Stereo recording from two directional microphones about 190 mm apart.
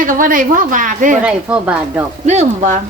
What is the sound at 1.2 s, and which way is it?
Speech, 10° right (ahead or behind).